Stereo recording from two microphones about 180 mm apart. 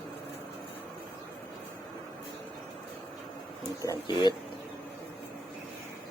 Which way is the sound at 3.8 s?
20° left (ahead or behind).